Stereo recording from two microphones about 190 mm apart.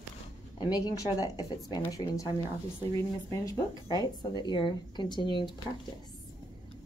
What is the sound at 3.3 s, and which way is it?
A woman's voice, 15° left (ahead or behind).